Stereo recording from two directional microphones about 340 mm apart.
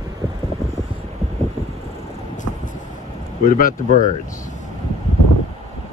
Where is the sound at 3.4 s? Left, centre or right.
Left.